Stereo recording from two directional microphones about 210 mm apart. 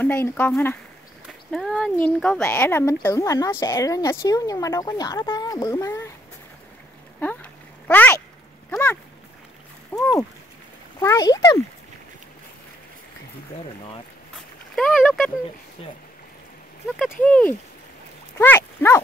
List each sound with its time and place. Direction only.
0.0 s speech: 10° left (ahead or behind)
7.2 s a sound: 10° left (ahead or behind)
9.9 s splash: 10° left (ahead or behind)
11.0 s a child's voice: 15° left (ahead or behind)
14.8 s a sound: 5° left (ahead or behind)
16.9 s speech: 5° left (ahead or behind)
18.4 s dog: 10° left (ahead or behind)